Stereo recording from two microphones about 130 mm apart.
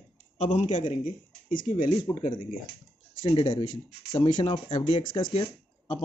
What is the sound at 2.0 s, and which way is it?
Speech, 35° left (ahead or behind).